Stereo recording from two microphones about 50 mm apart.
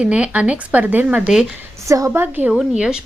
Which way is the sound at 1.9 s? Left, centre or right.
Right.